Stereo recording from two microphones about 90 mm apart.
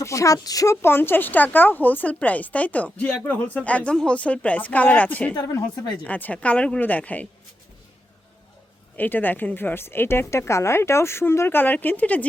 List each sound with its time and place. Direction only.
0.0 s speech: 35° left (ahead or behind)
0.8 s a woman's voice: 25° left (ahead or behind)
5.3 s a woman's voice: 40° left (ahead or behind)
6.1 s a woman's voice: 15° left (ahead or behind)
9.0 s speech: 20° left (ahead or behind)